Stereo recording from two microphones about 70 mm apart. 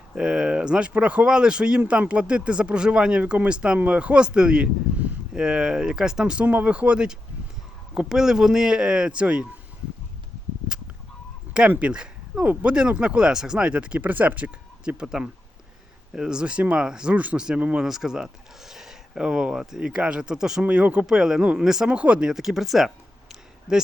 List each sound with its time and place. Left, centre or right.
0.1 s speech: centre
11.7 s speech: centre
17.8 s speech: centre
21.8 s speech: centre
22.3 s speech: centre
23.3 s a sound: centre